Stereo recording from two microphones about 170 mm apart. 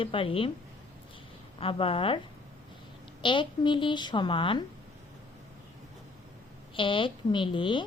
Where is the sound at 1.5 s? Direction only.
30° left (ahead or behind).